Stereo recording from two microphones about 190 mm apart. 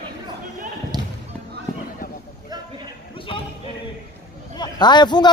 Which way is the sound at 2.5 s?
20° right (ahead or behind).